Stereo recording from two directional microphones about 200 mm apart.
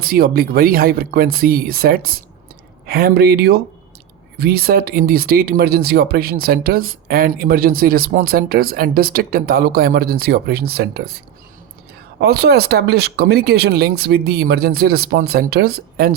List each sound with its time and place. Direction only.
0.0 s speech: 45° right (ahead or behind)
12.2 s speech: 50° right (ahead or behind)